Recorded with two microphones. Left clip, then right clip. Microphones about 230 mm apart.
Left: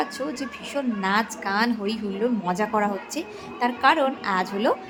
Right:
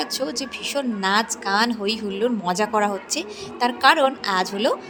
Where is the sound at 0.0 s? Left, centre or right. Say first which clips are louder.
Right 2 dB; right.